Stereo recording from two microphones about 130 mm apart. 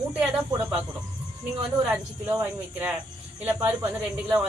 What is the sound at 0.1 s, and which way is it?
Speech, 10° right (ahead or behind).